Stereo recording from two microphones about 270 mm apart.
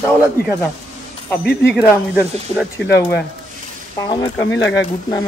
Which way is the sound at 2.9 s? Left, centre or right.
Left.